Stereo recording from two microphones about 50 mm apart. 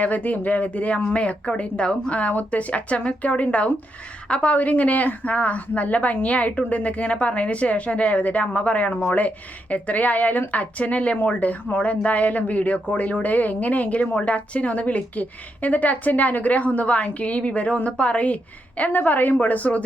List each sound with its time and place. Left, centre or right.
0.0 s a woman's voice: left
18.8 s a woman's voice: left